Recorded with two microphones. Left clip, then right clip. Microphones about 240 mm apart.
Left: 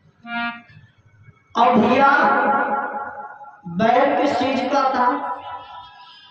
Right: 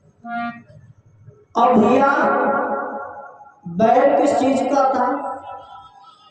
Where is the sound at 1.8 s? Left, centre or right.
Centre.